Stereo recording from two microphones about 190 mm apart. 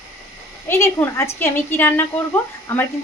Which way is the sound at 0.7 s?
10° left (ahead or behind).